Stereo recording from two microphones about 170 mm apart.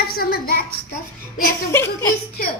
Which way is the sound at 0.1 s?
60° left (ahead or behind).